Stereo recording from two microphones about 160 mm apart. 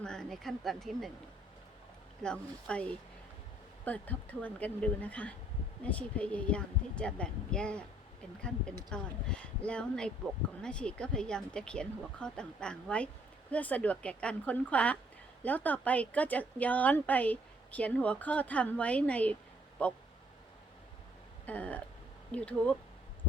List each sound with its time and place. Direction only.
0.0 s speech: 5° left (ahead or behind)
2.2 s a woman's voice: 5° left (ahead or behind)
8.9 s a woman's voice: 5° left (ahead or behind)
21.4 s a woman's voice: 10° left (ahead or behind)